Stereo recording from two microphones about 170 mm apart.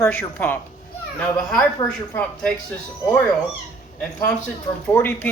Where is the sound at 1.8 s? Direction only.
5° left (ahead or behind).